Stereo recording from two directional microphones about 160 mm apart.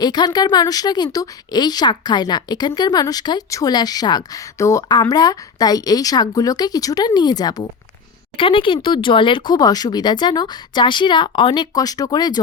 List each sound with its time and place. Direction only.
0.0 s a woman's voice: 25° left (ahead or behind)